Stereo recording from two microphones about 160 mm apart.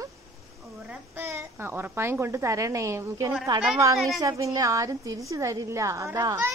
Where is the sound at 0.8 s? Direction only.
15° right (ahead or behind).